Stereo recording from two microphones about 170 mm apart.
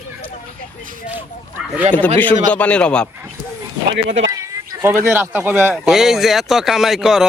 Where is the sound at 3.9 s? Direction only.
90° right.